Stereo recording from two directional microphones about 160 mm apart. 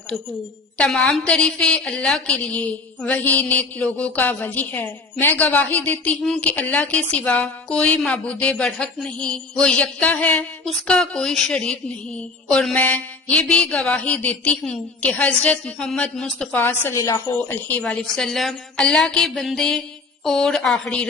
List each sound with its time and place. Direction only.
0.8 s a woman's voice: 5° left (ahead or behind)